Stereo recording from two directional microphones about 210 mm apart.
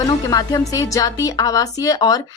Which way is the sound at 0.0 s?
15° left (ahead or behind).